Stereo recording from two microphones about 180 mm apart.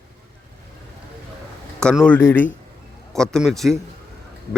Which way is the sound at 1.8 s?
5° left (ahead or behind).